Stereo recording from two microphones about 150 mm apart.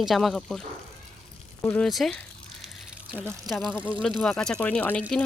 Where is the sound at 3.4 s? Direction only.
Centre (ahead or behind).